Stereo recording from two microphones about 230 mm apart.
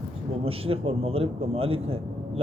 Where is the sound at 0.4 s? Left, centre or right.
Right.